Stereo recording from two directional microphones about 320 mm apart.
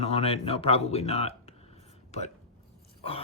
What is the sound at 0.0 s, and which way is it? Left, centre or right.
Speech, centre.